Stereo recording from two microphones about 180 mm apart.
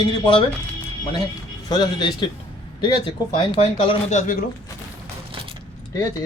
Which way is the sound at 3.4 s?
30° left (ahead or behind).